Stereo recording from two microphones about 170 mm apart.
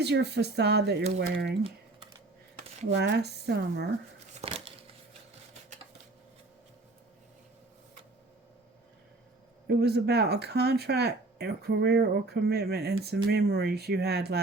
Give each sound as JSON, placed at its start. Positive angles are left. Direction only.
{"t": 0.0, "sound": "speech", "side_deg": -80}
{"t": 2.9, "sound": "speech", "side_deg": -80}
{"t": 4.4, "sound": "a sound", "side_deg": -35}
{"t": 9.6, "sound": "speech", "side_deg": -75}